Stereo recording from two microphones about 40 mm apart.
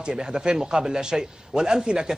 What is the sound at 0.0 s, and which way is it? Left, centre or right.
A man's voice, right.